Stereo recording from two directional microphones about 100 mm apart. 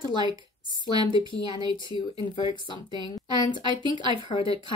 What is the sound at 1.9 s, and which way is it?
Speech, 60° left (ahead or behind).